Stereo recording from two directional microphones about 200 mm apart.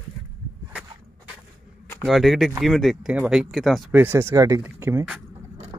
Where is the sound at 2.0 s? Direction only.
Centre (ahead or behind).